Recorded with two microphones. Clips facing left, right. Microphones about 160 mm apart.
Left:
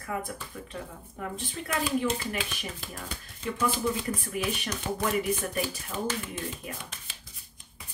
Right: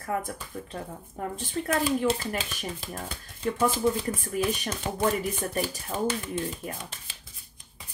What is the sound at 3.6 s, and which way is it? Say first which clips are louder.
Speech: right 3 dB; 40° right (ahead or behind).